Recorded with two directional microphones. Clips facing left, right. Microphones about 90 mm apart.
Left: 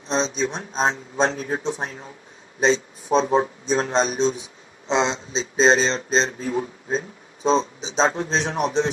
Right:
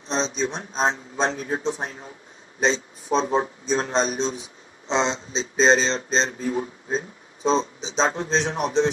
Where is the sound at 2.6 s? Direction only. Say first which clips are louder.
Left 3 dB; 35° left (ahead or behind).